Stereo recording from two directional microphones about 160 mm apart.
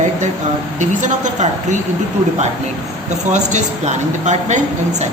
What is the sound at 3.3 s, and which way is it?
Speech, 50° right (ahead or behind).